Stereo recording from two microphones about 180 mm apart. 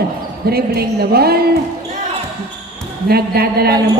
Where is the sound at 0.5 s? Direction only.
60° right (ahead or behind).